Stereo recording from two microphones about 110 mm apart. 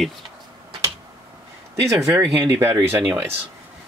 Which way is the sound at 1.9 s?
25° right (ahead or behind).